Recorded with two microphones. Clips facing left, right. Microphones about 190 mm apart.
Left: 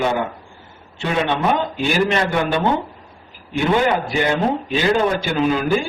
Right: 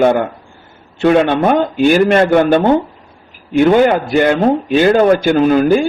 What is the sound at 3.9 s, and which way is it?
A man's voice, 50° right (ahead or behind).